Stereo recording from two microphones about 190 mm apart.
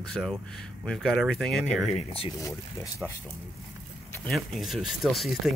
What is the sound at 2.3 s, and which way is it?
Speech, 15° left (ahead or behind).